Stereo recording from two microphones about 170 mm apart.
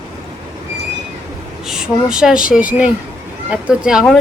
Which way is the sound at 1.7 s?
5° right (ahead or behind).